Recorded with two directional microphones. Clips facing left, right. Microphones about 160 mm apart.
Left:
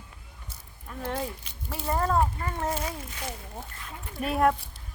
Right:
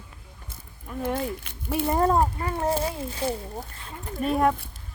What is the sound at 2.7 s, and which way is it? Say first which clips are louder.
Speech: right 6 dB; 30° right (ahead or behind).